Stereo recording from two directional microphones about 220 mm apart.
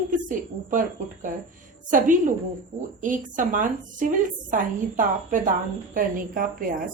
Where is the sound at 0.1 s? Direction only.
35° right (ahead or behind).